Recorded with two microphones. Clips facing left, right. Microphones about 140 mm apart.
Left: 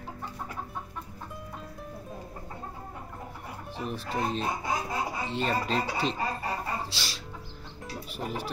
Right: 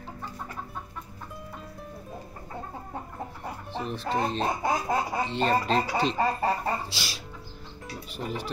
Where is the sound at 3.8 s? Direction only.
5° left (ahead or behind).